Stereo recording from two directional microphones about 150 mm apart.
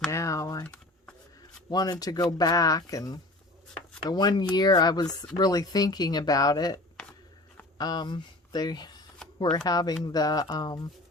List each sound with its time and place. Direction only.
0.1 s typing: 20° left (ahead or behind)
0.6 s a sound: 10° left (ahead or behind)
1.7 s speech: 25° left (ahead or behind)
7.8 s speech: 25° left (ahead or behind)